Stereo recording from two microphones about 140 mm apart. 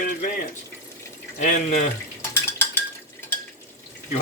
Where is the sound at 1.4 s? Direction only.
65° left (ahead or behind).